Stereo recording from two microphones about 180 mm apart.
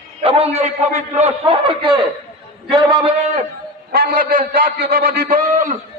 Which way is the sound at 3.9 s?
55° right (ahead or behind).